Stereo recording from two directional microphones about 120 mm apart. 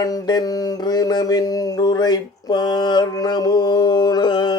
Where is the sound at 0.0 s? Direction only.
35° left (ahead or behind).